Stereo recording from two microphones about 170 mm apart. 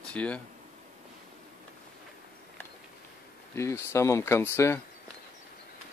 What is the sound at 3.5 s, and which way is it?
Speech, 15° left (ahead or behind).